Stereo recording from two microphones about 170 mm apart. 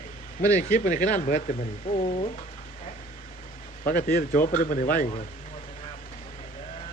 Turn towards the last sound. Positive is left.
turn(degrees=50)  # may be behind; listen again after turning